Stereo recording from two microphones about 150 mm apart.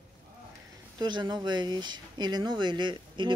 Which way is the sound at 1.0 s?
30° right (ahead or behind).